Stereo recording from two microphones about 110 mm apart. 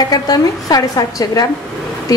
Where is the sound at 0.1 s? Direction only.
35° left (ahead or behind).